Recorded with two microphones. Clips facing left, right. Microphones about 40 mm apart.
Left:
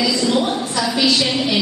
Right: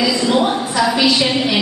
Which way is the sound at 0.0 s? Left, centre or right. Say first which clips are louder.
Right 2 dB; centre.